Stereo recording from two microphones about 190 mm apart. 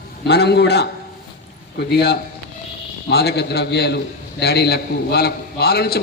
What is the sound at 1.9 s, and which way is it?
A man's voice, 60° left (ahead or behind).